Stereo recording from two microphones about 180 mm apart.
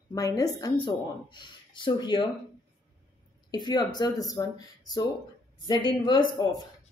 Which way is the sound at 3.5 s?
25° left (ahead or behind).